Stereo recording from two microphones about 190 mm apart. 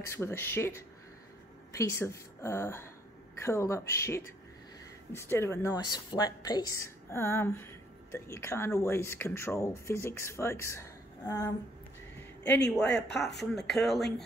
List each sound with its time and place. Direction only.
0.0 s speech: 15° left (ahead or behind)
12.6 s speech: 5° left (ahead or behind)
12.9 s speech: 65° left (ahead or behind)
13.5 s speech: centre (ahead or behind)